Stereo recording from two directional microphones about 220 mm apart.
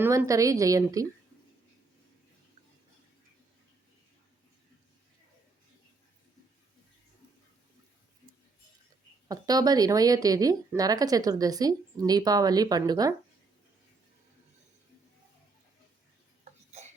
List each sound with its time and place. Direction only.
0.0 s a woman's voice: 10° right (ahead or behind)
9.3 s a woman's voice: 15° right (ahead or behind)
16.4 s a sound: 30° right (ahead or behind)